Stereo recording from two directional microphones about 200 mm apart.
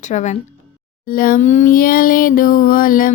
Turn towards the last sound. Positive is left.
turn(degrees=45)  # may be behind; listen again after turning